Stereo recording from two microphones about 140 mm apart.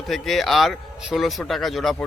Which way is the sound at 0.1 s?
Centre (ahead or behind).